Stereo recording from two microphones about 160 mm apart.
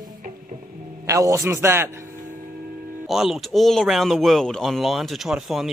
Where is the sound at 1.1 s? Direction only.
20° right (ahead or behind).